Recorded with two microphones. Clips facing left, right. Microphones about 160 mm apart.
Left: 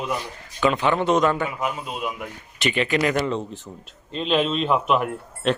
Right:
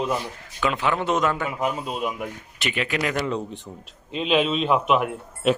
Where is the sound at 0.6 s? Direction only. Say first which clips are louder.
Left 3 dB; centre (ahead or behind).